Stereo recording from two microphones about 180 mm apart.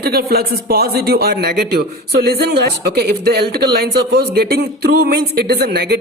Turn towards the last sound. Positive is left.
turn(degrees=-65)  # may be behind; listen again after turning